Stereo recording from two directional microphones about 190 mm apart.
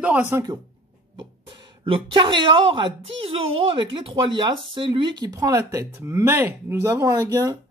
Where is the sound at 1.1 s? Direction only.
30° right (ahead or behind).